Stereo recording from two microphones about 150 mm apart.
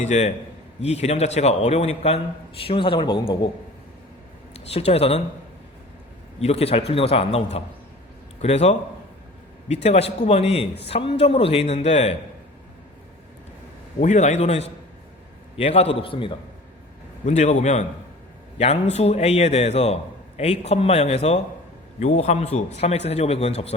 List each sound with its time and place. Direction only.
0.0 s a man's voice: 50° left (ahead or behind)
4.7 s a man's voice: 40° left (ahead or behind)
6.4 s a man's voice: 40° left (ahead or behind)
14.0 s a man's voice: 55° left (ahead or behind); by 16.3 s 35° left (ahead or behind)
17.2 s a man's voice: 50° left (ahead or behind)